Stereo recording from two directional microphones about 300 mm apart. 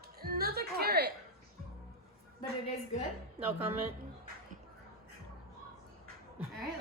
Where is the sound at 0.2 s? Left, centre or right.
Right.